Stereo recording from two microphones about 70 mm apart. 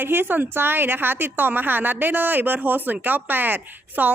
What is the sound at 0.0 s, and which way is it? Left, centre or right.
A woman's voice, right.